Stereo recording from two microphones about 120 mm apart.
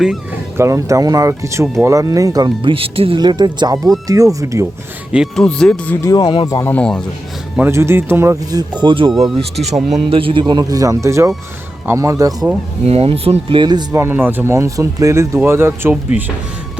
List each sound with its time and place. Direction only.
0.5 s speech: 25° right (ahead or behind)
2.6 s speech: 50° right (ahead or behind)
3.2 s speech: 35° right (ahead or behind)
5.1 s speech: 5° right (ahead or behind)
5.4 s speech: 5° left (ahead or behind)
6.0 s speech: 30° left (ahead or behind)
6.6 s speech: 15° left (ahead or behind)
7.6 s speech: 20° right (ahead or behind); by 9.1 s 40° right (ahead or behind)
9.9 s speech: 50° right (ahead or behind); by 12.5 s 25° right (ahead or behind)
12.8 s speech: 55° right (ahead or behind)
13.6 s speech: 35° right (ahead or behind)
13.9 s speech: 20° right (ahead or behind)